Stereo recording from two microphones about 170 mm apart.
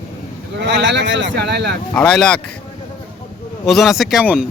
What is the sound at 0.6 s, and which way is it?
Speech, 90° right.